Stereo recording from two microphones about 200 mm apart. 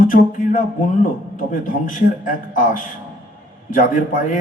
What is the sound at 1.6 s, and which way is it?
A man's voice, 40° left (ahead or behind).